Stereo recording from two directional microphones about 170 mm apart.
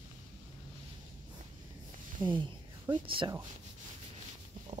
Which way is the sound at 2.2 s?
30° right (ahead or behind).